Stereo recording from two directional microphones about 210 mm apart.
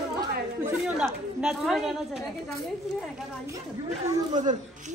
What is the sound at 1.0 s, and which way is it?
Speech, centre (ahead or behind).